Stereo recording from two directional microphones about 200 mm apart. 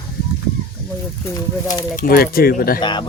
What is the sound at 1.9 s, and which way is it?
Speech, 50° left (ahead or behind).